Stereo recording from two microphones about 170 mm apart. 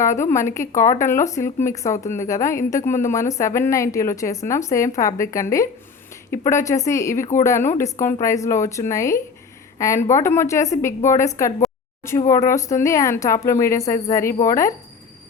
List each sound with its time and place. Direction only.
0.0 s speech: 15° left (ahead or behind)